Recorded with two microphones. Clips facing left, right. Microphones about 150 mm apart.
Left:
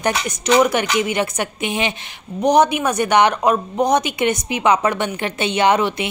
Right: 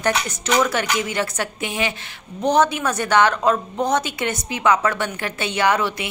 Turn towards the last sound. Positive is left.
turn(degrees=20)  # may be behind; listen again after turning